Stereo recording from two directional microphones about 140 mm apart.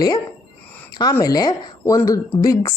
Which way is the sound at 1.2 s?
25° left (ahead or behind).